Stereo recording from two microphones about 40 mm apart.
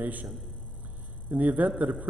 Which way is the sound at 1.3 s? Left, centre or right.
Right.